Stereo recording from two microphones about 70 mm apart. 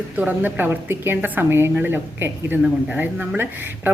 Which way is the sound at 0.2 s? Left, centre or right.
Right.